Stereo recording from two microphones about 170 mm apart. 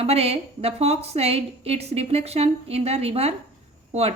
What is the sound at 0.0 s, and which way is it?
A woman's voice, 35° right (ahead or behind).